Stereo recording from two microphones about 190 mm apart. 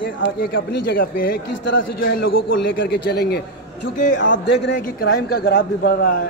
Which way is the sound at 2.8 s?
55° left (ahead or behind).